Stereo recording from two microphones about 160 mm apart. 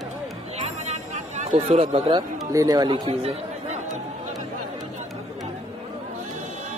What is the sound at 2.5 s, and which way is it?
Speech, 25° right (ahead or behind).